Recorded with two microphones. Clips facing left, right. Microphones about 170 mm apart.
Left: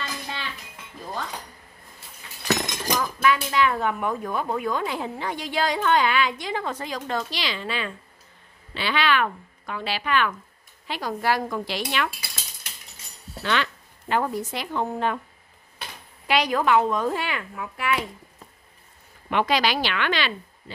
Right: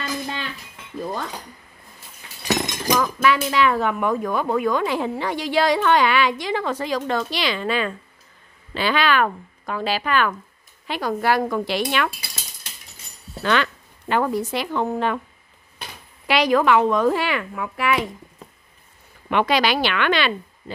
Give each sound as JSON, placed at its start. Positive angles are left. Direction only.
{"t": 2.4, "sound": "chink", "side_deg": 0}
{"t": 2.9, "sound": "speech", "side_deg": -90}
{"t": 10.9, "sound": "speech", "side_deg": -65}
{"t": 13.4, "sound": "speech", "side_deg": -50}
{"t": 14.0, "sound": "speech", "side_deg": -85}
{"t": 16.3, "sound": "speech", "side_deg": -85}
{"t": 19.3, "sound": "speech", "side_deg": -70}